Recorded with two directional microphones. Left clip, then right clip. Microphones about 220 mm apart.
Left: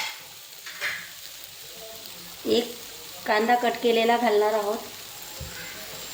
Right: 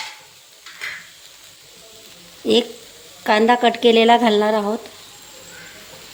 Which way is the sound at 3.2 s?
40° right (ahead or behind).